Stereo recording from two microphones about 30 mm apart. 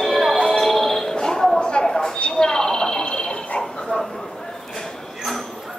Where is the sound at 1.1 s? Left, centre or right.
Left.